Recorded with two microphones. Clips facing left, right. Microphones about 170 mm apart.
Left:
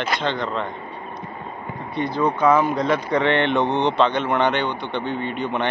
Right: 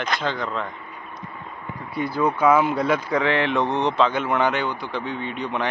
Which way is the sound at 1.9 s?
5° right (ahead or behind).